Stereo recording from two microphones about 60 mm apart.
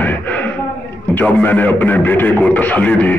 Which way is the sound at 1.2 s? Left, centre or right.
Left.